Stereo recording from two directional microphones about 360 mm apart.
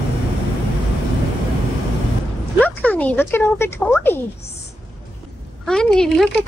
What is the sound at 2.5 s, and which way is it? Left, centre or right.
Speech, centre.